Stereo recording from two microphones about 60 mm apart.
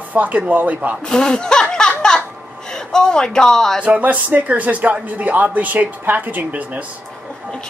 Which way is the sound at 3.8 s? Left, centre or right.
Right.